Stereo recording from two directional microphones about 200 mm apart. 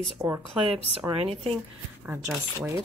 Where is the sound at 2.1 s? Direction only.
15° right (ahead or behind).